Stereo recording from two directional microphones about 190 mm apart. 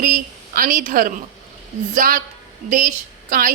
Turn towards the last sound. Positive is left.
turn(degrees=-45)  # may be behind; listen again after turning